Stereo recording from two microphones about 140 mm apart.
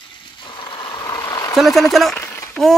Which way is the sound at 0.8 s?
30° left (ahead or behind).